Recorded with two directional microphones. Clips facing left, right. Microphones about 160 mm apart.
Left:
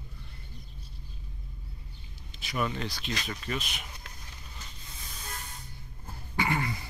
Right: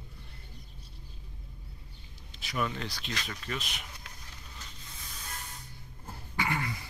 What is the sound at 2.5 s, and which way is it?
Speech, 10° left (ahead or behind).